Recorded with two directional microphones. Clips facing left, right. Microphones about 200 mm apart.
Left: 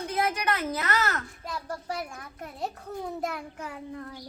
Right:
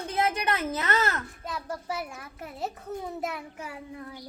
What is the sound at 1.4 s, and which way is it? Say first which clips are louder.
A child's voice: right 1 dB; centre (ahead or behind).